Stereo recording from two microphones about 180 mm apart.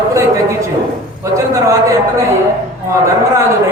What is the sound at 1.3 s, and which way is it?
Speech, 20° right (ahead or behind).